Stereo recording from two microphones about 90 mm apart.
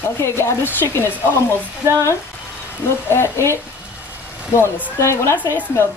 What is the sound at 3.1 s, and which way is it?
Speech, 30° left (ahead or behind).